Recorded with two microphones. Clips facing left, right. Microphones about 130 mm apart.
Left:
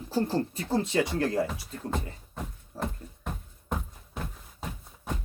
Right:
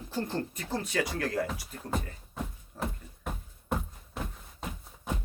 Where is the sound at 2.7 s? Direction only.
35° left (ahead or behind).